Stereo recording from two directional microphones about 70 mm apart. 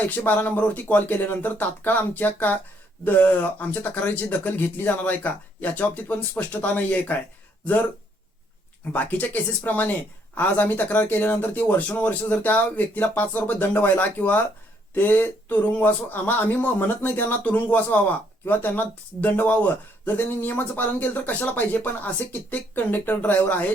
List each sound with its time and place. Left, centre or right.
0.3 s speech: left
8.9 s speech: left